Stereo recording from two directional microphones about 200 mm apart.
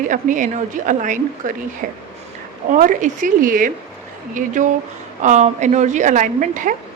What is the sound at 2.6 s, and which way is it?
A woman's voice, 40° right (ahead or behind).